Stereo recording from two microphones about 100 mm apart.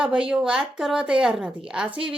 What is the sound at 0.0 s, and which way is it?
Speech, 10° right (ahead or behind).